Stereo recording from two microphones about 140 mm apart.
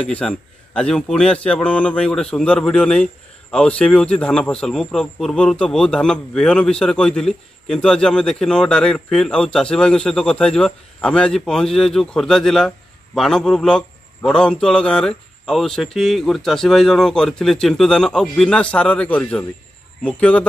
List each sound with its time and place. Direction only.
0.1 s a man's voice: 5° left (ahead or behind)